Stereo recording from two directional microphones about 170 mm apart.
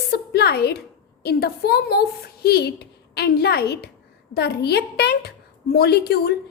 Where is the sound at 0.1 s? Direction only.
70° left (ahead or behind).